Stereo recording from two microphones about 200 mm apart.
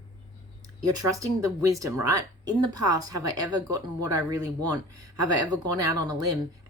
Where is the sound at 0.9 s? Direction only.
15° right (ahead or behind).